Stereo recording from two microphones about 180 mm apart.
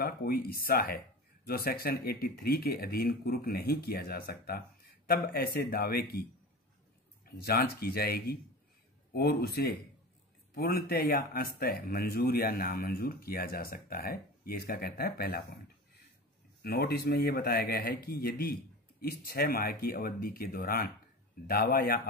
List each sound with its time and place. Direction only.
0.0 s speech: 60° left (ahead or behind)
7.2 s speech: 60° left (ahead or behind)
16.6 s speech: 60° left (ahead or behind)